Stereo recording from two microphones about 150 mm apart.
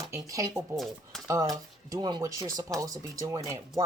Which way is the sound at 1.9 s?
30° right (ahead or behind).